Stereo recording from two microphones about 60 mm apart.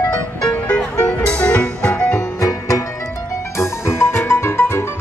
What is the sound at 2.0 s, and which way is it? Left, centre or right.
Music, left.